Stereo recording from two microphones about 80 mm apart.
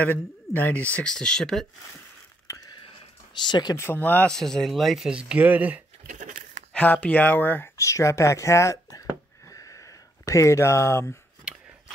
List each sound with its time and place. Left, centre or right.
0.0 s speech: left
1.1 s speech: centre
2.4 s a sound: left
3.4 s speech: left
3.7 s speech: left
4.0 s speech: centre
4.3 s speech: centre
5.0 s speech: centre
6.7 s speech: centre
7.7 s speech: left
9.5 s a sound: left